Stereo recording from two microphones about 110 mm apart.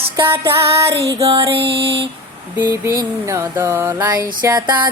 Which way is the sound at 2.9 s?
30° right (ahead or behind).